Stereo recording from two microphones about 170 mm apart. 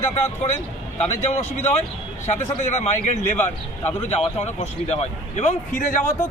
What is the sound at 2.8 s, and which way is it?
Speech, 40° left (ahead or behind).